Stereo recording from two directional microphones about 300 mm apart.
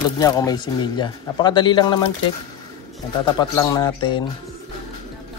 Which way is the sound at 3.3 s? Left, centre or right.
Centre.